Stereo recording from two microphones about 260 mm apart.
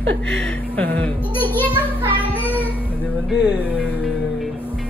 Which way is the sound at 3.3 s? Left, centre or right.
Centre.